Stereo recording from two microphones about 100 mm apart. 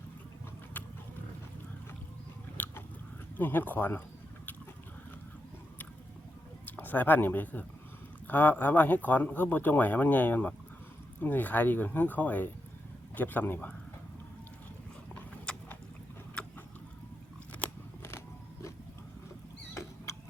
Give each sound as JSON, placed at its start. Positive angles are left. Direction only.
{"t": 2.6, "sound": "biting", "side_deg": 15}
{"t": 3.3, "sound": "speech", "side_deg": 20}
{"t": 6.7, "sound": "speech", "side_deg": 15}
{"t": 15.1, "sound": "horse", "side_deg": 10}
{"t": 16.4, "sound": "vehicle", "side_deg": 10}
{"t": 19.7, "sound": "rodents", "side_deg": 30}